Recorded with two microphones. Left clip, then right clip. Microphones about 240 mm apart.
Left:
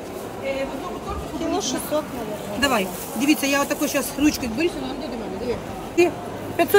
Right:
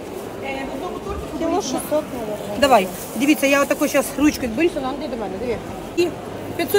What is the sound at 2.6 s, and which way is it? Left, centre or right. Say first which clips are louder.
Speech: right 7 dB; centre.